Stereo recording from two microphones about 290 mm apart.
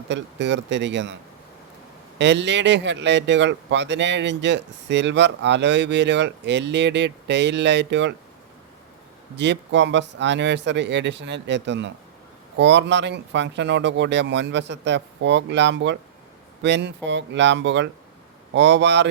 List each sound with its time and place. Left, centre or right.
0.1 s a man's voice: right
2.1 s a man's voice: right
9.3 s a man's voice: right